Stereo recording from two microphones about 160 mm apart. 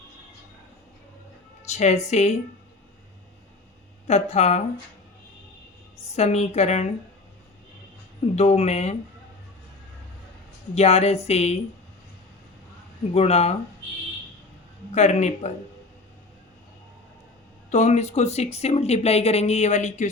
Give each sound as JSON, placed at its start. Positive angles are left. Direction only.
{"t": 1.6, "sound": "a woman's voice", "side_deg": 45}
{"t": 4.0, "sound": "a woman's voice", "side_deg": 40}
{"t": 6.1, "sound": "speech", "side_deg": 45}
{"t": 8.4, "sound": "speech", "side_deg": 45}
{"t": 10.8, "sound": "speech", "side_deg": 40}
{"t": 13.1, "sound": "speech", "side_deg": 40}
{"t": 14.9, "sound": "speech", "side_deg": 45}
{"t": 17.7, "sound": "speech", "side_deg": 45}